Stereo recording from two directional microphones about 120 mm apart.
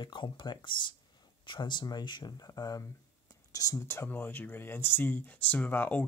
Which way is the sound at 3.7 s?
20° left (ahead or behind).